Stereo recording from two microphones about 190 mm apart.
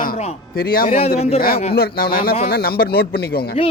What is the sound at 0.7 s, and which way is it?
A man's voice, 50° left (ahead or behind).